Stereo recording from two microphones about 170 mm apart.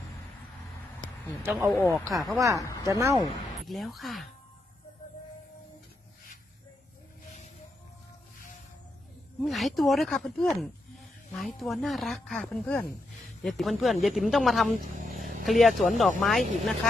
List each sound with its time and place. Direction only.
1.4 s speech: 15° right (ahead or behind)
2.1 s speech: centre (ahead or behind)
2.4 s speech: 20° right (ahead or behind)
3.7 s speech: centre (ahead or behind)
9.5 s speech: centre (ahead or behind)
14.8 s vehicle: 50° right (ahead or behind)
15.4 s speech: centre (ahead or behind)